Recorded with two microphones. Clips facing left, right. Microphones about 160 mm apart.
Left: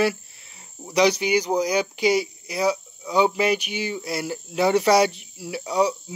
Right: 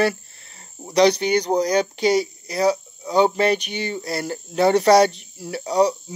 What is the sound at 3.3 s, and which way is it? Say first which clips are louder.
Speech: right 2 dB; 5° left (ahead or behind).